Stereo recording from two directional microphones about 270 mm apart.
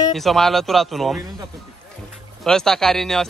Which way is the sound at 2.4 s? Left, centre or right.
Centre.